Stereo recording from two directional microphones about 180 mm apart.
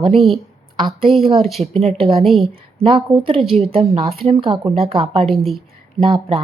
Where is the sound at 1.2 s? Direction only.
30° right (ahead or behind).